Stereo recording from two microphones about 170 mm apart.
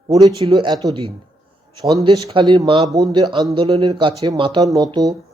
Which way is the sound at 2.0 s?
35° right (ahead or behind).